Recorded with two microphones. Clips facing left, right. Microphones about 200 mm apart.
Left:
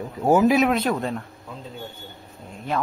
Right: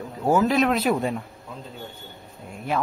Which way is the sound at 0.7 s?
10° right (ahead or behind).